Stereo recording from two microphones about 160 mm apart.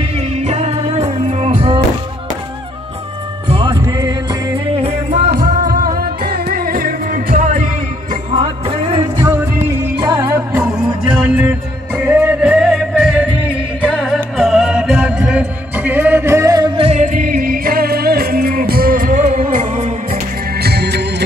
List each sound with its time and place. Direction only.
0.4 s music: 40° right (ahead or behind)
3.4 s music: 35° right (ahead or behind)
3.8 s music: 25° right (ahead or behind)
4.7 s music: 40° right (ahead or behind)
5.3 s music: 65° right (ahead or behind)
8.4 s music: 35° right (ahead or behind)
9.9 s music: 20° right (ahead or behind)
16.8 s music: 45° right (ahead or behind)
20.5 s music: 90° right